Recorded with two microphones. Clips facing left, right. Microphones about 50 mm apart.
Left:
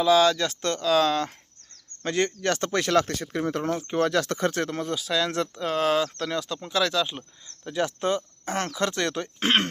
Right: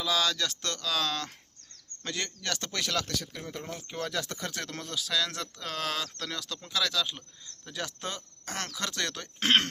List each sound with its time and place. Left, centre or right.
0.0 s speech: left
3.3 s speech: left
3.8 s speech: left
4.4 s speech: left
4.7 s speech: left